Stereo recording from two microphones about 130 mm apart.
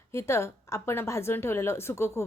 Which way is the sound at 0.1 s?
20° left (ahead or behind).